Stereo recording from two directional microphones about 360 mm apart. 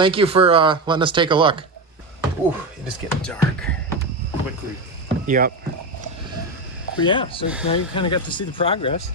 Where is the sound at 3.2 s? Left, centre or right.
Centre.